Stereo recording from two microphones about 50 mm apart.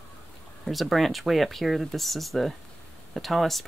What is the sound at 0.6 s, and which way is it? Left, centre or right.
Speech, centre.